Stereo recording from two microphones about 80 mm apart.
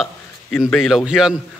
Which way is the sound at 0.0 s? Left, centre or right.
Centre.